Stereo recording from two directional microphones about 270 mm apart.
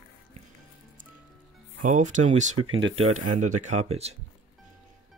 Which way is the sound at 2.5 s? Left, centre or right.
Right.